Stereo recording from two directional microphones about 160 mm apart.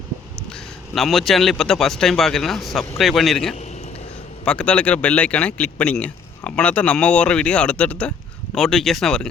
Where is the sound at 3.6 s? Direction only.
45° left (ahead or behind).